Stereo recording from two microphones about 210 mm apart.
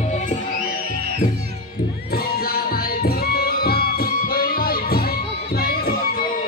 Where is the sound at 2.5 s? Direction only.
45° left (ahead or behind).